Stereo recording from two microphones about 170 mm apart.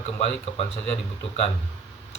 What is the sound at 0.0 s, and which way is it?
Speech, 35° left (ahead or behind).